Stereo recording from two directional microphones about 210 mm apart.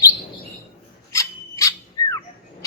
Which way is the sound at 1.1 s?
15° left (ahead or behind).